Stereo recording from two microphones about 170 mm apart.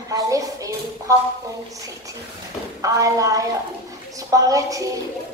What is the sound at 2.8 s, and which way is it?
A woman's voice, 20° right (ahead or behind).